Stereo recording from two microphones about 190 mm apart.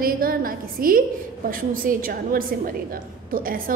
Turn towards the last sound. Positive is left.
turn(degrees=-50)  # may be behind; listen again after turning